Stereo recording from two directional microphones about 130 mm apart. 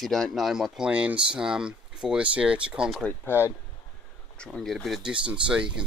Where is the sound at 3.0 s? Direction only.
15° left (ahead or behind).